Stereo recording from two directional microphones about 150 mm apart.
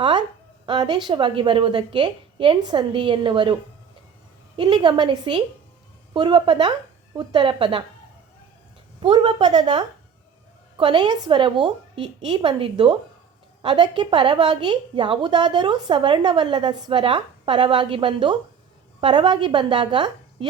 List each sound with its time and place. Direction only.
0.0 s a sound: 30° right (ahead or behind)
1.0 s a woman's voice: 30° right (ahead or behind)
4.5 s a woman's voice: 35° right (ahead or behind)
9.0 s a woman's voice: 30° right (ahead or behind)